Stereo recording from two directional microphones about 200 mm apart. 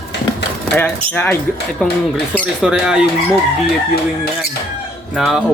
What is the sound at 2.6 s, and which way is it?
Speech, 5° right (ahead or behind).